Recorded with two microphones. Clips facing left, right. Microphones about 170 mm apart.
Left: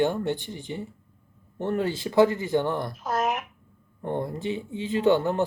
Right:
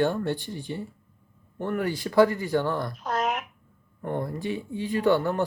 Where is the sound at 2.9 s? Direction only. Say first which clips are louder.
Left 1 dB; 5° left (ahead or behind).